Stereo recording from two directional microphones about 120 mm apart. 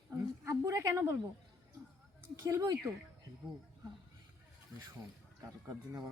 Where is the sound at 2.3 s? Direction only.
25° right (ahead or behind).